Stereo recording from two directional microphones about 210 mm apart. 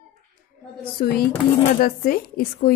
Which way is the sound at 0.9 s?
45° left (ahead or behind).